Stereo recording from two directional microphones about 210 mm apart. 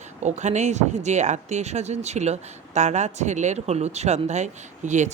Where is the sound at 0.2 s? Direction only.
35° right (ahead or behind).